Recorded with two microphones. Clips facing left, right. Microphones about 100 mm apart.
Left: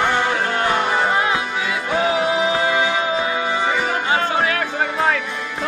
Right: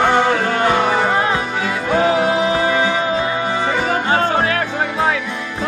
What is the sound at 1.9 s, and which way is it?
Music, 35° right (ahead or behind).